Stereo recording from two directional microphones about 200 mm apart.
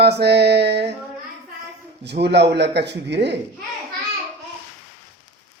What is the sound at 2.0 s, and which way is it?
Speech, 55° right (ahead or behind).